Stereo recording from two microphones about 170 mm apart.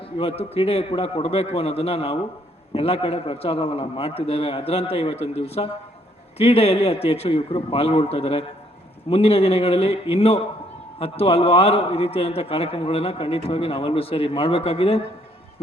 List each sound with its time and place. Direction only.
0.2 s a man's voice: 35° left (ahead or behind)